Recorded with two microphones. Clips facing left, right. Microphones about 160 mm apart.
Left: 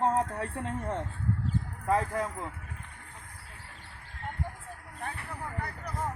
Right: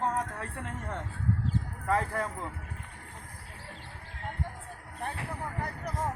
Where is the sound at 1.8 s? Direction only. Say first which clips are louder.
Left 1 dB; 15° left (ahead or behind).